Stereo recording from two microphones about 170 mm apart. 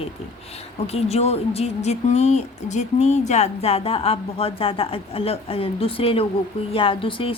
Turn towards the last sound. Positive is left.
turn(degrees=30)  # may be behind; listen again after turning